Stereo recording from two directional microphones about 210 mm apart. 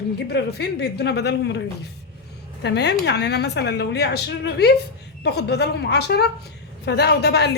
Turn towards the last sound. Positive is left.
turn(degrees=50)  # may be behind; listen again after turning